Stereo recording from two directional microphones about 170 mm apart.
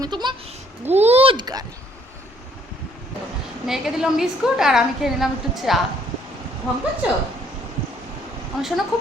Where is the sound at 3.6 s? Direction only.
Centre (ahead or behind).